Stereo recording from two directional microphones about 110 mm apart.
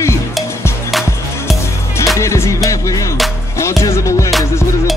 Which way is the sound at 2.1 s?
25° left (ahead or behind).